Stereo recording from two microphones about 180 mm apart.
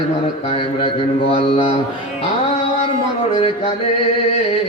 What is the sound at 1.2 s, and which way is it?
Mantra, 30° left (ahead or behind).